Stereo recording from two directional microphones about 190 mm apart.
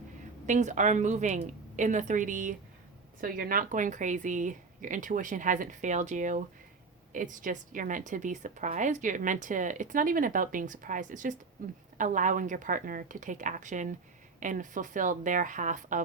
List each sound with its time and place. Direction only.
0.4 s a woman's voice: 40° right (ahead or behind)